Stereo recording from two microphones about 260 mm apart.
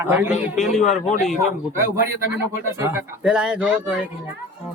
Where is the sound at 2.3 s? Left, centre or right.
Centre.